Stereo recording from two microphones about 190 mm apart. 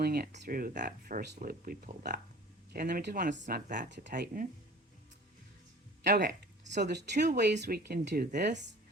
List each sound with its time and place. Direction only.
0.0 s speech: 55° right (ahead or behind)
3.4 s speech: 40° right (ahead or behind)
3.8 s speech: 65° right (ahead or behind)
4.1 s speech: 45° right (ahead or behind)
6.0 s speech: 60° right (ahead or behind)